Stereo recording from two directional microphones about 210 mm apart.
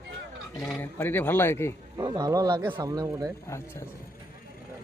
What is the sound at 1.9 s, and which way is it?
Speech, 20° right (ahead or behind).